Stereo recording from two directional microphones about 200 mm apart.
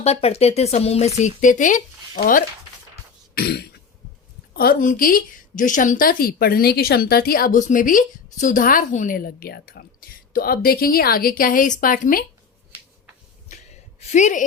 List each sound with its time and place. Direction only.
0.0 s speech: 30° left (ahead or behind)
3.3 s a woman's voice: 50° left (ahead or behind)
14.0 s speech: 35° left (ahead or behind)